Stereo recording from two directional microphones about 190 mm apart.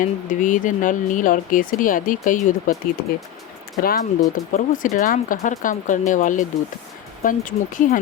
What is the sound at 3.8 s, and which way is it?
Speech, 50° left (ahead or behind).